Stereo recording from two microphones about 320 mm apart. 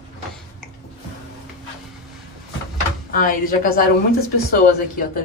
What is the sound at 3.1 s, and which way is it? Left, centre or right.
Speech, left.